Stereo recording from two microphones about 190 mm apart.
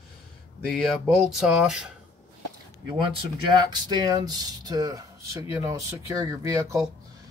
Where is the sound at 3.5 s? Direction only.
20° right (ahead or behind).